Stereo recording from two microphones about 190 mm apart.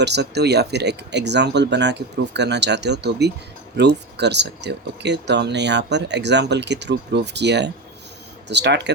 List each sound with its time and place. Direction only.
0.0 s speech: 65° right (ahead or behind)